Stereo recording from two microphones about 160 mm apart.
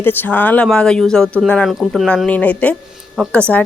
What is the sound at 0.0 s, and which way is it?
Speech, 10° left (ahead or behind).